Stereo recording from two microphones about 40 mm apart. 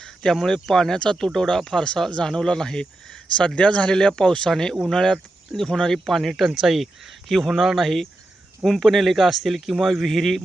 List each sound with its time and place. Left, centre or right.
0.3 s speech: centre
3.3 s speech: left; by 6.3 s centre
6.3 s speech: centre